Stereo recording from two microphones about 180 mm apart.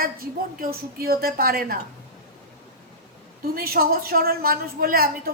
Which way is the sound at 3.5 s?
55° right (ahead or behind).